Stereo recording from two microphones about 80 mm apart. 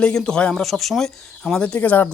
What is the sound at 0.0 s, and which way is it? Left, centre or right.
Speech, centre.